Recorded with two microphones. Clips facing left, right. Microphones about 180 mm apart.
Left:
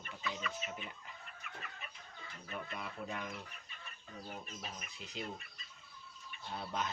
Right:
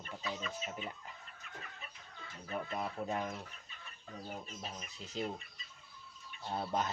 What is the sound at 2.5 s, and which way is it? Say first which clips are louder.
Speech: right 6 dB; 35° right (ahead or behind).